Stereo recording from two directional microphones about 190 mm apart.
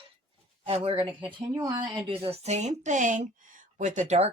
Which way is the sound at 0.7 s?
30° right (ahead or behind).